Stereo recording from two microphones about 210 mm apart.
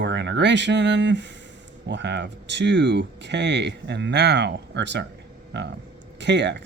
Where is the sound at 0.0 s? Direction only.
55° right (ahead or behind).